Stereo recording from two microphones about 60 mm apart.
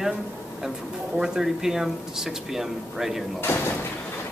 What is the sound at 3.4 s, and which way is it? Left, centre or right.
Speech, left.